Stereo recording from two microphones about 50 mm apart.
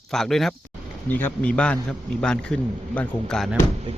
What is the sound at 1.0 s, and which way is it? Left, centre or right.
Speech, left.